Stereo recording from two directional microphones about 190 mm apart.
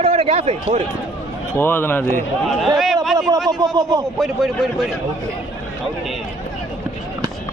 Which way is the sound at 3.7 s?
20° right (ahead or behind).